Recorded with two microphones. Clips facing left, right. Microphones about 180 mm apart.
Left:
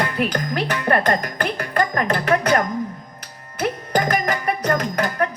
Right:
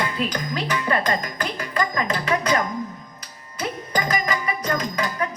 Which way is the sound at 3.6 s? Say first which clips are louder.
Left 5 dB; 60° left (ahead or behind).